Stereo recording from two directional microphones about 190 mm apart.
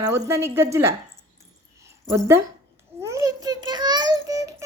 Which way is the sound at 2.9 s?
15° right (ahead or behind).